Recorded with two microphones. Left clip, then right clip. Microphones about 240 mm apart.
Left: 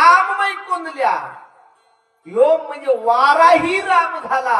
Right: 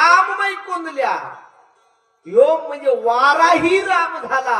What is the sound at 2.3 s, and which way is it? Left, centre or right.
A man's voice, right.